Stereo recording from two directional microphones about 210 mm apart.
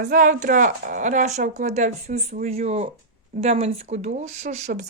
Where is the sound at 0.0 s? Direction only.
40° right (ahead or behind).